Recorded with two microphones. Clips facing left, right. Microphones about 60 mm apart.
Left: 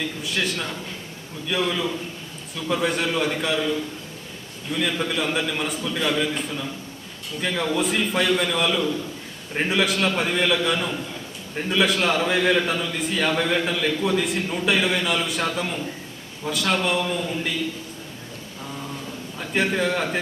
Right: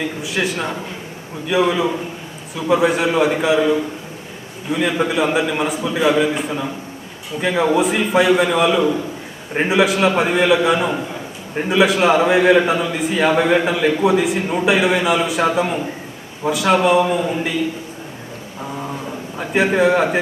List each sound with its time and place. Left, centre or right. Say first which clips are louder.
0.2 s a man's voice: right 5 dB; centre
4.7 s a man's voice: right 7 dB; centre
10.9 s a sound: right 6 dB; right
11.7 s a man's voice: right 7 dB; centre
14.7 s a man's voice: right 6 dB; centre
16.5 s a man's voice: right 8 dB; centre
17.4 s a man's voice: right 6 dB; centre
19.5 s a man's voice: right 8 dB; centre